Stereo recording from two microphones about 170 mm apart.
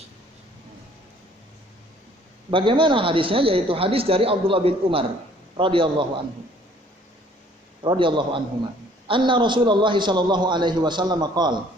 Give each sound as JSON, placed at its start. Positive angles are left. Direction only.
{"t": 2.5, "sound": "a man's voice", "side_deg": -30}
{"t": 7.8, "sound": "a man's voice", "side_deg": -30}